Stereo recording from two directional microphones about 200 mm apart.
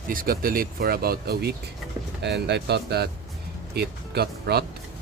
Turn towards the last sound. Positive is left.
turn(degrees=-50)  # may be behind; listen again after turning